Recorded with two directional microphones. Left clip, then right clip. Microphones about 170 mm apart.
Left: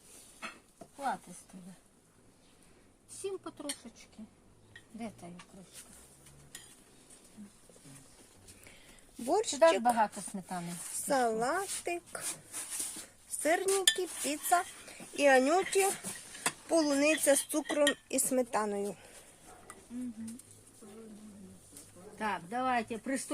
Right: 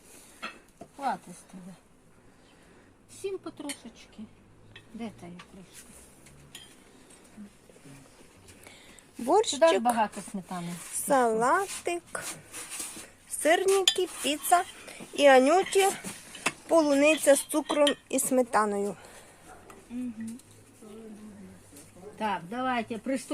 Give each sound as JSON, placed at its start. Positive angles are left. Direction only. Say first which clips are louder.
{"t": 1.0, "sound": "speech", "louder": "right 4 dB", "side_deg": 0}
{"t": 3.2, "sound": "speech", "louder": "right 4 dB", "side_deg": 0}
{"t": 4.9, "sound": "speech", "louder": "right 3 dB", "side_deg": 5}
{"t": 9.2, "sound": "speech", "louder": "right 4 dB", "side_deg": 0}
{"t": 13.3, "sound": "speech", "louder": "right 7 dB", "side_deg": 0}
{"t": 22.2, "sound": "speech", "louder": "right 3 dB", "side_deg": -15}